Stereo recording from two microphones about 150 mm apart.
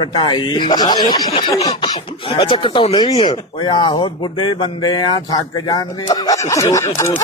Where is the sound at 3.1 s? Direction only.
45° left (ahead or behind).